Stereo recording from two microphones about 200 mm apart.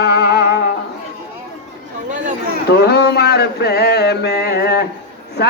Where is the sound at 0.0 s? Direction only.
50° left (ahead or behind).